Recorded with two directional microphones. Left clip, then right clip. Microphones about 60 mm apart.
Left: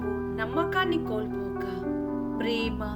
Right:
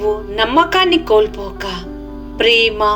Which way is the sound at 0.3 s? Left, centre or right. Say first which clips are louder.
Right 15 dB; left.